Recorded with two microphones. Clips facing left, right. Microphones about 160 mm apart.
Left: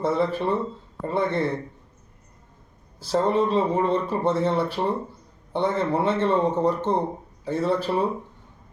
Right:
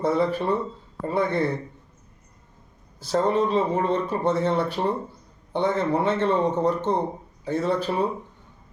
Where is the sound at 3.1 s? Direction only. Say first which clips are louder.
Even; centre (ahead or behind).